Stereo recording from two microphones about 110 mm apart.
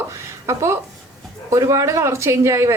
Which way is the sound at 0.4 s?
25° right (ahead or behind).